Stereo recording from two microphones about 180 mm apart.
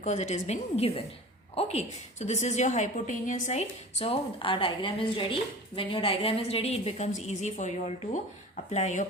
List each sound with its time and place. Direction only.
0.0 s a woman's voice: 40° left (ahead or behind)